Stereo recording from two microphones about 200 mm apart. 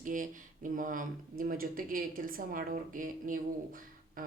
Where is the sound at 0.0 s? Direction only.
40° right (ahead or behind).